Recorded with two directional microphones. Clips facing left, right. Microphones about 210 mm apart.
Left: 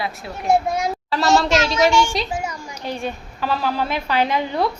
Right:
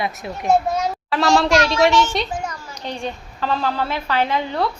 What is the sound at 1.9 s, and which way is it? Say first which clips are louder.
A child's voice: even; 10° left (ahead or behind).